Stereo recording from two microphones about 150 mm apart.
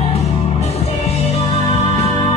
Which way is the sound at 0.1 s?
45° left (ahead or behind).